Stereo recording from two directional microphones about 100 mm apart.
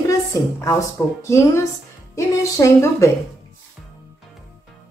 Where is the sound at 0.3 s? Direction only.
35° left (ahead or behind).